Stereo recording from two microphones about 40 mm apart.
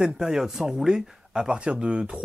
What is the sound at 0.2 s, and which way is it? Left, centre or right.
Speech, centre.